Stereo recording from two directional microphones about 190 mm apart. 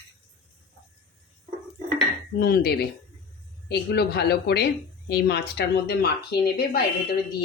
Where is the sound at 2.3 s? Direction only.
55° left (ahead or behind).